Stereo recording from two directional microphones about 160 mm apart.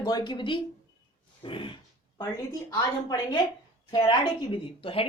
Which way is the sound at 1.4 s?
35° left (ahead or behind).